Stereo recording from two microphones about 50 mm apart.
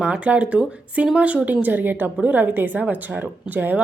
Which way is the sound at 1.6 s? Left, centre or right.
Right.